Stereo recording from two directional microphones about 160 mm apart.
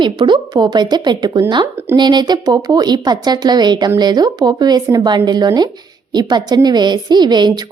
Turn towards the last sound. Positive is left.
turn(degrees=-25)  # may be behind; listen again after turning